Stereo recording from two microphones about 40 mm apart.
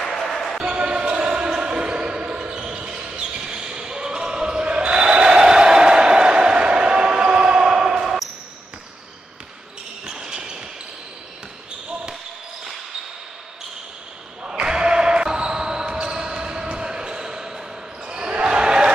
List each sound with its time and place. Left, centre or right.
0.0 s basketball bounce: centre
0.7 s basketball bounce: right
10.0 s a sound: centre
14.4 s basketball bounce: right